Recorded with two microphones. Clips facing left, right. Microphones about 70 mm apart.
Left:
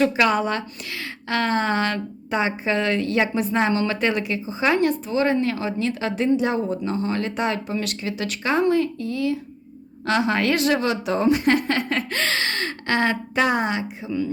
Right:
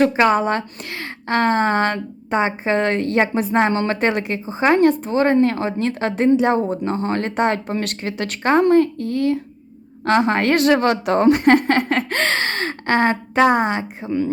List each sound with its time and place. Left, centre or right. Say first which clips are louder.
0.0 s a woman's voice: right 4 dB; right